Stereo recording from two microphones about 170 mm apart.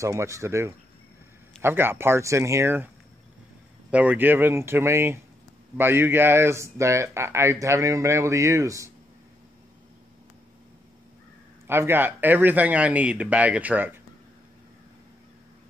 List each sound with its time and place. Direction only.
0.0 s speech: 15° right (ahead or behind)
3.9 s speech: 10° right (ahead or behind)
11.6 s speech: 15° right (ahead or behind)